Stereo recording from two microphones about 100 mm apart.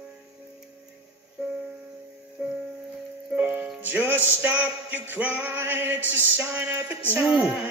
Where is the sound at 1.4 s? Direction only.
10° right (ahead or behind).